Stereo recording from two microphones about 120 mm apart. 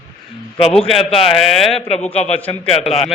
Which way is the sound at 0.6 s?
55° left (ahead or behind).